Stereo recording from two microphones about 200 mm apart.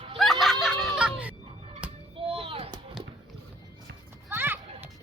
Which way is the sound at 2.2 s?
30° right (ahead or behind).